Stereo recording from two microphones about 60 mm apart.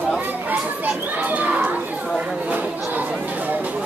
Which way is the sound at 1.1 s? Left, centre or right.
Right.